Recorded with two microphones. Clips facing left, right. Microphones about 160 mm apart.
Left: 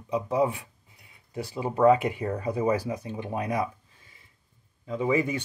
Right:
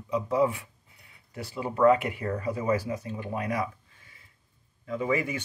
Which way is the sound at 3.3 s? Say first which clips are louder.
Left 2 dB; 30° left (ahead or behind).